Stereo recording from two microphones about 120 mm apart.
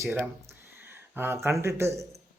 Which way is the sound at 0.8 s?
20° right (ahead or behind).